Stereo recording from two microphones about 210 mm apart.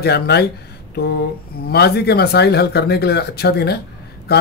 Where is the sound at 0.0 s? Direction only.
50° left (ahead or behind).